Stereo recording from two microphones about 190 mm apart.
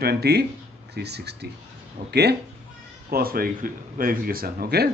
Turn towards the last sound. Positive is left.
turn(degrees=-55)  # may be behind; listen again after turning